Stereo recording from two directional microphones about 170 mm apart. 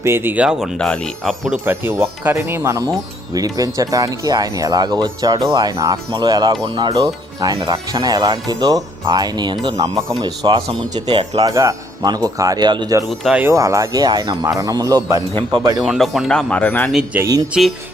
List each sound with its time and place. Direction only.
0.0 s speech: 15° right (ahead or behind); by 1.5 s centre (ahead or behind)
1.6 s speech: 15° right (ahead or behind)
13.1 s speech: centre (ahead or behind)
13.4 s speech: 20° right (ahead or behind)
15.8 s speech: centre (ahead or behind)
16.9 s speech: 5° right (ahead or behind)